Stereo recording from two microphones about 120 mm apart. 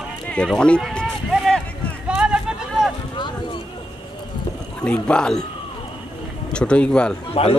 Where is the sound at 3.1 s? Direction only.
40° left (ahead or behind).